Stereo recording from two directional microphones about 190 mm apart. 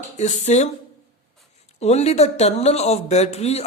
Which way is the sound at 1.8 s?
35° left (ahead or behind).